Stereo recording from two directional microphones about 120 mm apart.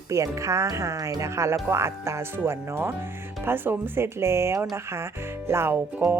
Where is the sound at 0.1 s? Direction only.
25° right (ahead or behind).